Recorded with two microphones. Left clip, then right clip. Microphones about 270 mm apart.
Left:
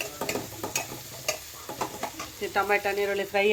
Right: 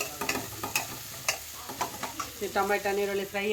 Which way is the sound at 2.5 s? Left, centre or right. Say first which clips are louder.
Left 2 dB; centre.